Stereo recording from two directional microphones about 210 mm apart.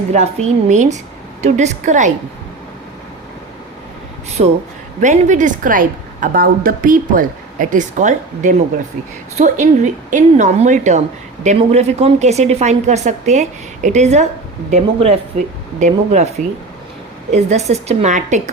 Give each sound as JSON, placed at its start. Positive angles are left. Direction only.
{"t": 0.1, "sound": "a woman's voice", "side_deg": -35}
{"t": 4.4, "sound": "a woman's voice", "side_deg": -30}
{"t": 17.3, "sound": "a woman's voice", "side_deg": -30}